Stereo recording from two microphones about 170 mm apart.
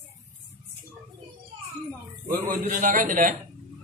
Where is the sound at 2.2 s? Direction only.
55° right (ahead or behind).